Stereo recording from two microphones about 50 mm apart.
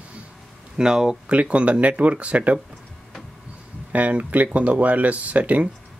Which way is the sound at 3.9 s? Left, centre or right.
Right.